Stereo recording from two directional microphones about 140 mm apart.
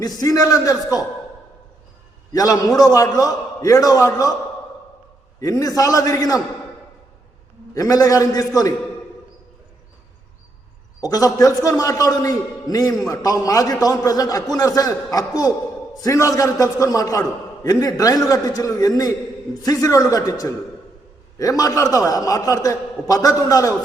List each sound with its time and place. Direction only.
0.0 s a man's voice: 25° left (ahead or behind)
2.3 s a man's voice: 25° left (ahead or behind)
5.4 s a man's voice: 25° left (ahead or behind)
7.7 s a man's voice: 25° left (ahead or behind)
11.0 s a man's voice: 25° left (ahead or behind)